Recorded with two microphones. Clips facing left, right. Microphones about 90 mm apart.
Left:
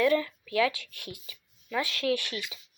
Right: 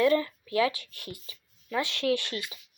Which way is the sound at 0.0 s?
35° right (ahead or behind).